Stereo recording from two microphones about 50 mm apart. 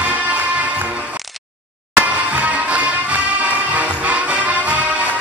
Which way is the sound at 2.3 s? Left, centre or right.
Right.